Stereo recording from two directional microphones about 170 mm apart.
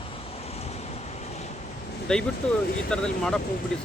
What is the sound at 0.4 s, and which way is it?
Waves, 40° left (ahead or behind).